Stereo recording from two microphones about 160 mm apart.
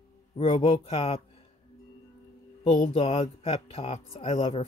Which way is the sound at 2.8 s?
35° left (ahead or behind).